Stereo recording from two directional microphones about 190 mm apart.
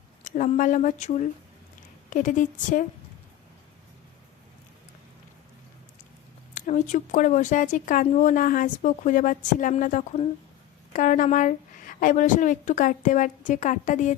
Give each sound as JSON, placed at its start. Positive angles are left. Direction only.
{"t": 0.3, "sound": "speech", "side_deg": 40}
{"t": 6.5, "sound": "speech", "side_deg": 40}